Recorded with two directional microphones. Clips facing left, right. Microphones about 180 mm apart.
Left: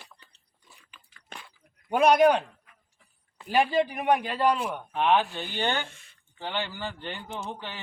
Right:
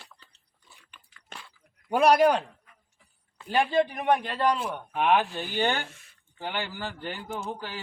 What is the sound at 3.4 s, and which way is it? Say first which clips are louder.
A man's voice: even; 10° left (ahead or behind).